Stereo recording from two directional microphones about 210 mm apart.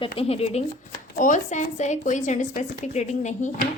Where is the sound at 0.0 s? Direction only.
30° left (ahead or behind).